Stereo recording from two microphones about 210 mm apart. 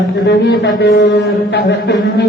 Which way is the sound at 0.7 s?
55° left (ahead or behind).